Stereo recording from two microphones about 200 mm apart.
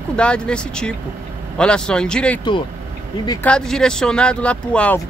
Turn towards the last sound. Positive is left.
turn(degrees=5)  # may be behind; listen again after turning